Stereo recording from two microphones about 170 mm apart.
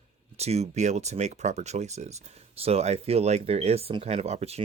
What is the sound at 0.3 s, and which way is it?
Speech, 40° right (ahead or behind).